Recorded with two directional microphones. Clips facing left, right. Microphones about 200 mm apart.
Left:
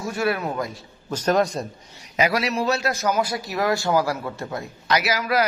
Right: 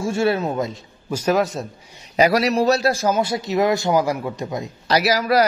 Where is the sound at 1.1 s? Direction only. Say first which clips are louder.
Right 1 dB; 5° right (ahead or behind).